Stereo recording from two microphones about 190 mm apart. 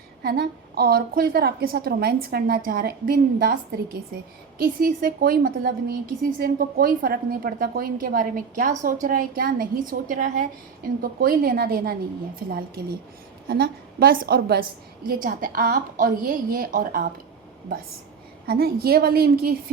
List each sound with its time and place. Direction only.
0.2 s a woman's voice: 55° right (ahead or behind)
18.4 s a woman's voice: 55° right (ahead or behind)